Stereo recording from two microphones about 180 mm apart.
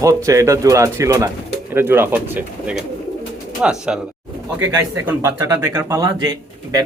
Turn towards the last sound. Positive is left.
turn(degrees=-20)  # may be behind; listen again after turning